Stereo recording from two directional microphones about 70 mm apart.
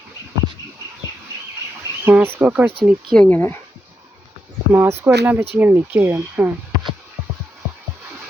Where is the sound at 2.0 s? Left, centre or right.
Right.